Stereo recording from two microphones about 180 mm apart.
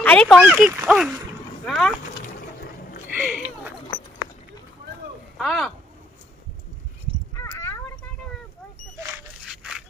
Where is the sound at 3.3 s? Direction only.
5° right (ahead or behind).